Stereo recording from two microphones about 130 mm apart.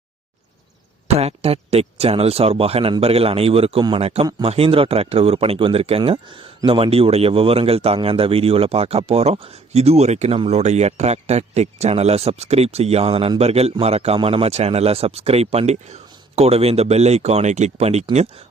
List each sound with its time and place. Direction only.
1.0 s speech: 50° right (ahead or behind)
6.0 s speech: 40° right (ahead or behind); by 18.0 s 55° right (ahead or behind)